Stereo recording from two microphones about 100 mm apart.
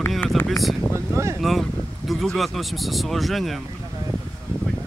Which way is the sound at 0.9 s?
30° right (ahead or behind).